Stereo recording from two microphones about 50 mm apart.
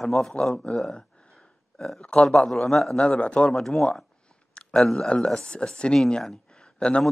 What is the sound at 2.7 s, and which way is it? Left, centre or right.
Speech, centre.